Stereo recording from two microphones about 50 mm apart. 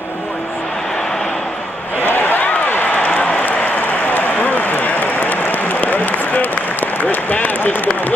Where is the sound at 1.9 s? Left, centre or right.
Left.